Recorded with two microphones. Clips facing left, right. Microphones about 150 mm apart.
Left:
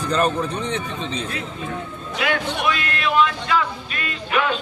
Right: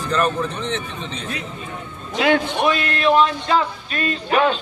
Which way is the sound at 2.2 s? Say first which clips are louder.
Right 6 dB; 30° right (ahead or behind).